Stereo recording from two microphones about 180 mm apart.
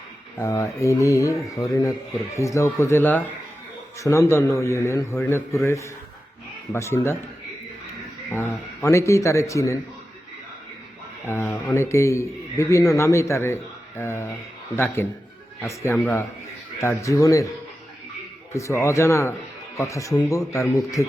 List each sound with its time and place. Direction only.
0.3 s a man's voice: 15° left (ahead or behind)
8.3 s a man's voice: 15° left (ahead or behind)
11.3 s a man's voice: 15° left (ahead or behind)
18.5 s a man's voice: 15° left (ahead or behind)